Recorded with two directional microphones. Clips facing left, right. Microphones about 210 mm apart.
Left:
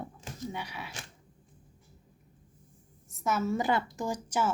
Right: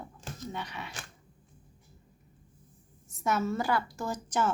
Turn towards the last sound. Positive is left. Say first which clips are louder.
# even
turn(degrees=10)  # may be behind; listen again after turning